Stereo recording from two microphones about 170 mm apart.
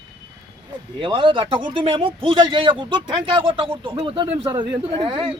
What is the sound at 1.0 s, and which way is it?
A man's voice, 30° right (ahead or behind).